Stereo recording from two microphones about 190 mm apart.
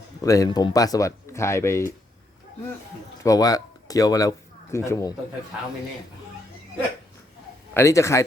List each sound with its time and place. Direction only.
0.2 s speech: 20° left (ahead or behind)
3.2 s speech: 20° left (ahead or behind)
7.7 s speech: 15° left (ahead or behind)